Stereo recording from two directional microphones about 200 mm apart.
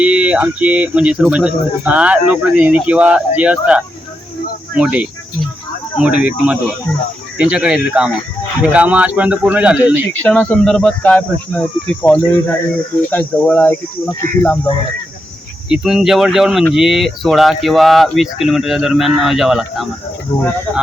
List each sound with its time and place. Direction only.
0.0 s speech: 5° right (ahead or behind)
10.1 s speech: 5° left (ahead or behind)
15.7 s speech: centre (ahead or behind)
20.3 s speech: 30° left (ahead or behind)